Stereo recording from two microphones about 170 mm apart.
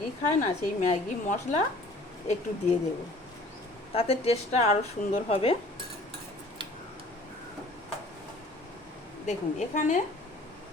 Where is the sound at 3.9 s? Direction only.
35° left (ahead or behind).